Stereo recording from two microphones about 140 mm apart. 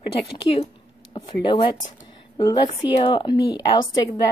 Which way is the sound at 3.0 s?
35° left (ahead or behind).